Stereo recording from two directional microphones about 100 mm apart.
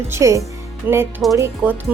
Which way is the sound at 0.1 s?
30° right (ahead or behind).